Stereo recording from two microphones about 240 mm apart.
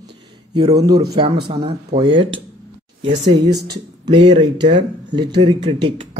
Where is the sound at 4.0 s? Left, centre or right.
Centre.